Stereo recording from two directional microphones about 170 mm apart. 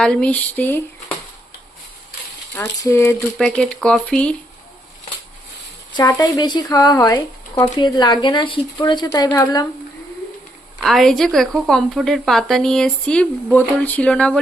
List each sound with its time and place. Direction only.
0.0 s speech: 5° left (ahead or behind)
2.6 s speech: 15° left (ahead or behind)
3.3 s speech: 5° left (ahead or behind)
6.0 s speech: 20° left (ahead or behind)
10.8 s speech: centre (ahead or behind)